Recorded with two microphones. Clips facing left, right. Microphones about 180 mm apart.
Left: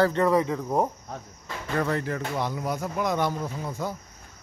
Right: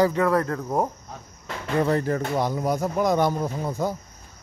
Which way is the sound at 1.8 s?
40° right (ahead or behind).